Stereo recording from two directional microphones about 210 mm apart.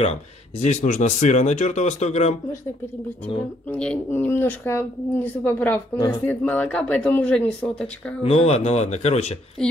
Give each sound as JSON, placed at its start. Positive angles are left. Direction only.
{"t": 0.0, "sound": "speech", "side_deg": 30}
{"t": 3.7, "sound": "speech", "side_deg": 5}
{"t": 8.2, "sound": "speech", "side_deg": 30}